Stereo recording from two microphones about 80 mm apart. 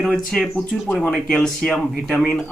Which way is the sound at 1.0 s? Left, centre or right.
Centre.